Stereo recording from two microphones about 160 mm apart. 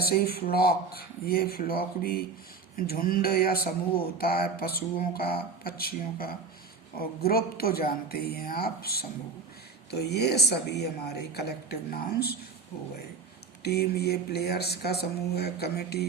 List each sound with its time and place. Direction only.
0.0 s speech: 75° left (ahead or behind)
9.9 s speech: 90° left
13.6 s speech: 90° left